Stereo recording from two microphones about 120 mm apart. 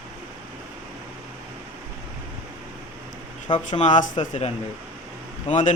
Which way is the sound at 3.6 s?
80° left.